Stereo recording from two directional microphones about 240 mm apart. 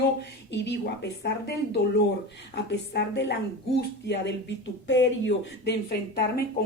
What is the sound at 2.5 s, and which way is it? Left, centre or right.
A woman's voice, left.